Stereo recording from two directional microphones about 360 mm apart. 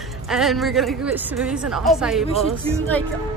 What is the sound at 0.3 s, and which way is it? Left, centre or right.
A woman's voice, centre.